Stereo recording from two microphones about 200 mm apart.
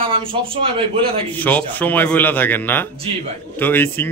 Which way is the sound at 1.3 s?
10° left (ahead or behind).